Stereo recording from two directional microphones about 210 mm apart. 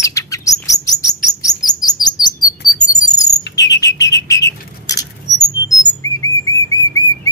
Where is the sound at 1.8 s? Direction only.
20° left (ahead or behind).